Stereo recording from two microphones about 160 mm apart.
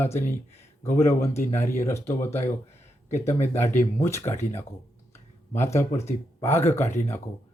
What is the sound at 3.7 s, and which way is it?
Speech, 15° left (ahead or behind).